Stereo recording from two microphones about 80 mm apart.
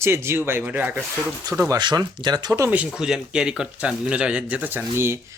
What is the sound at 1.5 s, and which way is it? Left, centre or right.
Speech, right.